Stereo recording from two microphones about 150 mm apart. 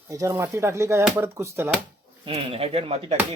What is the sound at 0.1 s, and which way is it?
Speech, 20° right (ahead or behind).